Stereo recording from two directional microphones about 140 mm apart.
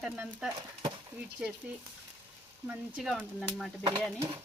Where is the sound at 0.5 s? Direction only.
35° right (ahead or behind).